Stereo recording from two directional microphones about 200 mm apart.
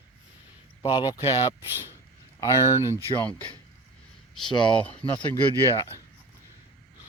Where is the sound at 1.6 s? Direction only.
10° right (ahead or behind).